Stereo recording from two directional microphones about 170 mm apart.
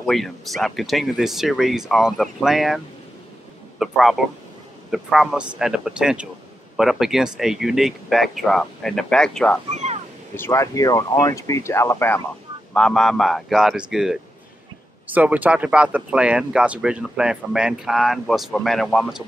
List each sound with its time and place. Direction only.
0.0 s speech: centre (ahead or behind)
3.8 s speech: centre (ahead or behind)
10.3 s speech: 15° left (ahead or behind)
12.7 s speech: 5° left (ahead or behind)